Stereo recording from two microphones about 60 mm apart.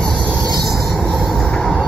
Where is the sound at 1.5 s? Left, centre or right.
Centre.